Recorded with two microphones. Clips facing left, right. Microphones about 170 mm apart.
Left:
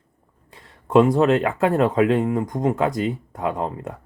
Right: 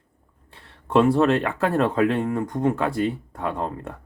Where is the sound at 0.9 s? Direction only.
15° left (ahead or behind).